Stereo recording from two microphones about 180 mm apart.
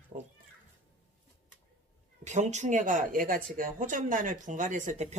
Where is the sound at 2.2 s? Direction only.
40° right (ahead or behind).